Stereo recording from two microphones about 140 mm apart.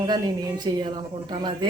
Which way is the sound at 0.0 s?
30° right (ahead or behind).